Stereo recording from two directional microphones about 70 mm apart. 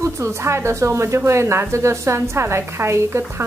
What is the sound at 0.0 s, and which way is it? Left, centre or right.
Speech, right.